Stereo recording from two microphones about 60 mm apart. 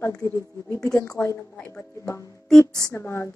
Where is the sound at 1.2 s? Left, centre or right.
Left.